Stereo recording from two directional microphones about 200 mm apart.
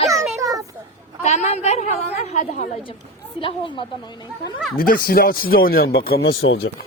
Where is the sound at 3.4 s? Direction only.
25° left (ahead or behind).